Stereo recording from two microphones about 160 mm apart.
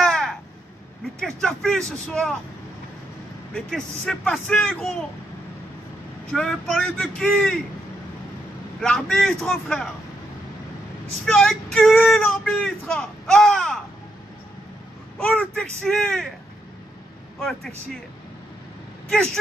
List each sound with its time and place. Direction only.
0.0 s crow: centre (ahead or behind)
1.2 s speech: centre (ahead or behind)
3.5 s speech: 5° left (ahead or behind)
6.3 s speech: centre (ahead or behind)
8.8 s speech: 5° left (ahead or behind)
11.2 s speech: 5° left (ahead or behind)
15.3 s speech: 5° left (ahead or behind)
17.4 s speech: 5° left (ahead or behind)
19.0 s speech: 5° left (ahead or behind)